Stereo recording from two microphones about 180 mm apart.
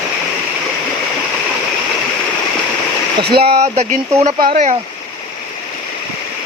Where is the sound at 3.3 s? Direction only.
60° right (ahead or behind).